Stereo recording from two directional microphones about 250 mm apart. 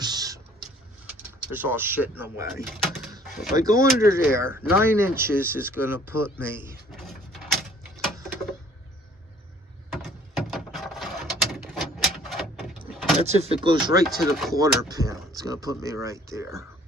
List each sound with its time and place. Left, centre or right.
0.0 s printer: centre
1.5 s speech: centre
2.8 s a sound: centre
3.6 s speech: centre
6.9 s mechanisms: centre
9.9 s a sound: centre
12.9 s vehicle: centre
13.2 s speech: right
14.2 s speech: centre
14.5 s speech: centre